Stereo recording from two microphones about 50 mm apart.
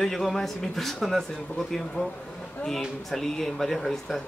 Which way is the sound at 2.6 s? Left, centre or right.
Centre.